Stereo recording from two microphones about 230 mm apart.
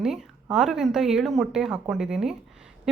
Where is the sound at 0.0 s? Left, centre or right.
Centre.